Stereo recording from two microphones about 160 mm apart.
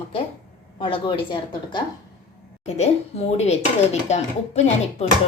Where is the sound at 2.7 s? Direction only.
40° left (ahead or behind).